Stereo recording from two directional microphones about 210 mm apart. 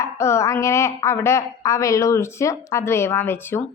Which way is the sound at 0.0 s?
15° left (ahead or behind).